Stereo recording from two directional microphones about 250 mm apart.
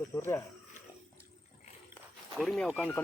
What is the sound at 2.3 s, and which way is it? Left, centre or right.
Speech, centre.